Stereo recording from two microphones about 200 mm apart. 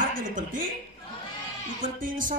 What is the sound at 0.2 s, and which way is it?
Speech, 40° right (ahead or behind).